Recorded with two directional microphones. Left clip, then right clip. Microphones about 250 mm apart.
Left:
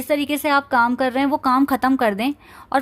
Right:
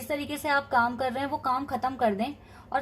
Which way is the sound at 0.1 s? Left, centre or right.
Left.